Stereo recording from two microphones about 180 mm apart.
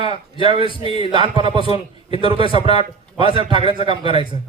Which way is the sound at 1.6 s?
30° left (ahead or behind).